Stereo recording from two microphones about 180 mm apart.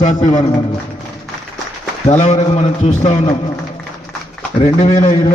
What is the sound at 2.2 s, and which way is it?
A man's voice, 40° left (ahead or behind).